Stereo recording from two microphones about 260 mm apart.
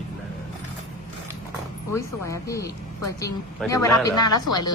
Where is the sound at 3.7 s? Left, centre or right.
Centre.